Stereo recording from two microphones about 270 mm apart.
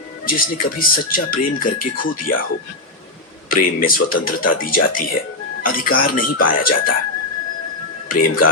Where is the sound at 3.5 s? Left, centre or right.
Left.